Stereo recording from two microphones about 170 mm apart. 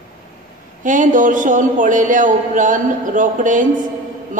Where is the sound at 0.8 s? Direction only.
50° right (ahead or behind).